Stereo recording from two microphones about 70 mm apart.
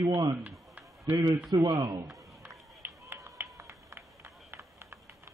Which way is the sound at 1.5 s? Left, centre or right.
Right.